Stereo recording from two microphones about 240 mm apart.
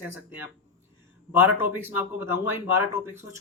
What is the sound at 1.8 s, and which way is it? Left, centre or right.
Speech, centre.